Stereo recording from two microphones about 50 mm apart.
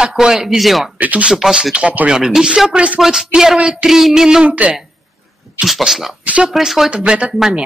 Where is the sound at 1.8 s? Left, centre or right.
Right.